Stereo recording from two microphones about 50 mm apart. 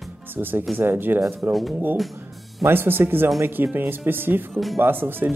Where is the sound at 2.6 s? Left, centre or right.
Right.